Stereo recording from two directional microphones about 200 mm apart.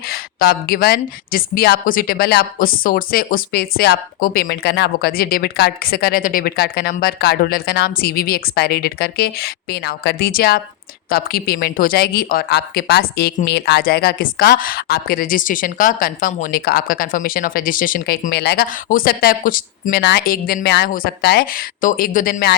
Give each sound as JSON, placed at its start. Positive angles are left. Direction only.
{"t": 0.1, "sound": "speech", "side_deg": 50}